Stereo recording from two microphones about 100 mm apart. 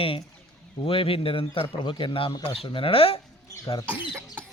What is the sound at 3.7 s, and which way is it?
Speech, 60° left (ahead or behind).